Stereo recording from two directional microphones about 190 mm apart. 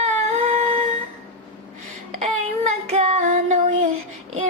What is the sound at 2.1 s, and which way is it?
Child singing, 35° right (ahead or behind).